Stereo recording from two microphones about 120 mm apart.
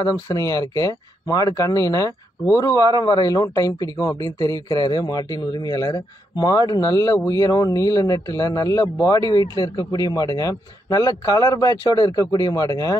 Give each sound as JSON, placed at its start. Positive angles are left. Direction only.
{"t": 0.0, "sound": "a man's voice", "side_deg": 30}